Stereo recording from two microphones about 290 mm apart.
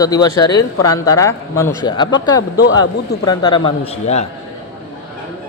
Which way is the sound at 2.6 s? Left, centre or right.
Left.